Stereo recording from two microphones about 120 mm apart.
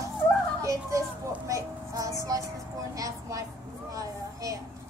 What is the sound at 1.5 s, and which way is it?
Music, 25° right (ahead or behind).